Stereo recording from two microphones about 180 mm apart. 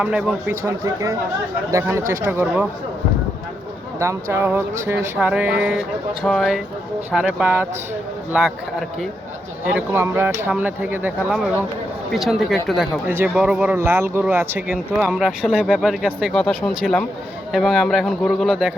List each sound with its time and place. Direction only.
0.0 s speech: 5° right (ahead or behind)
4.0 s speech: 15° right (ahead or behind)
9.6 s speech: 10° right (ahead or behind)